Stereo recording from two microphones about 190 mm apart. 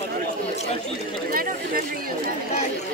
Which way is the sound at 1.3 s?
50° right (ahead or behind).